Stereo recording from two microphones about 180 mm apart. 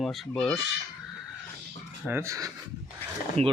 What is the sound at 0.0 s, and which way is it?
Speech, centre (ahead or behind).